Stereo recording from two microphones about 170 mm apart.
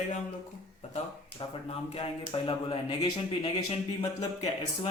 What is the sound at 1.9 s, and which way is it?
Speech, 35° left (ahead or behind).